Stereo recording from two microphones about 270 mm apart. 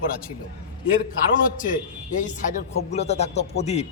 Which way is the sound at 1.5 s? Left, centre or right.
Left.